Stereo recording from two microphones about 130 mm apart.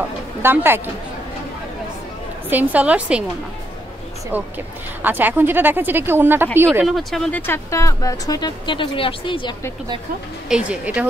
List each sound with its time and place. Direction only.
0.4 s speech: 15° right (ahead or behind)
2.5 s speech: 10° right (ahead or behind)
5.0 s speech: 15° right (ahead or behind)
6.9 s speech: centre (ahead or behind); by 9.5 s 40° left (ahead or behind)
10.5 s speech: 10° right (ahead or behind)